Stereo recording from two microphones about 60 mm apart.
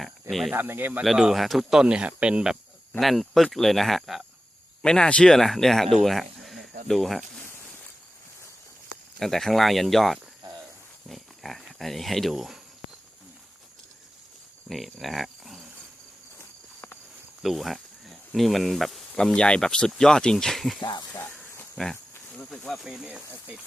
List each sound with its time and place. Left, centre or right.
0.0 s cricket: centre
0.5 s speech: right
1.0 s speech: centre
3.0 s speech: centre
4.8 s speech: centre
9.1 s speech: centre
14.7 s speech: centre
17.4 s speech: centre
19.1 s speech: centre